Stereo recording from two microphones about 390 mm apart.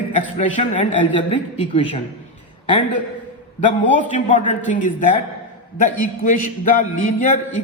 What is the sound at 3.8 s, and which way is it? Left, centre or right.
A man's voice, centre.